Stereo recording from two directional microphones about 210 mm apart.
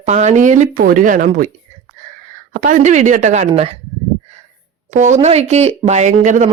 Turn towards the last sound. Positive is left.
turn(degrees=-35)  # may be behind; listen again after turning